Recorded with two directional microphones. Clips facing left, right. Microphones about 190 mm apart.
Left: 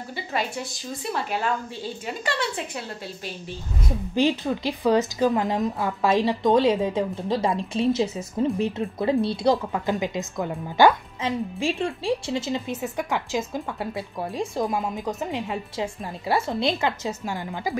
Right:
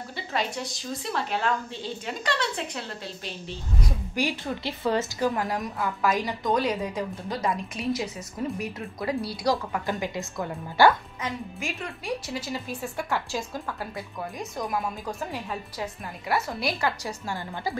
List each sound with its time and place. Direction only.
1.1 s a woman's voice: 5° left (ahead or behind)
3.8 s a woman's voice: 25° left (ahead or behind)
11.6 s a woman's voice: 30° left (ahead or behind)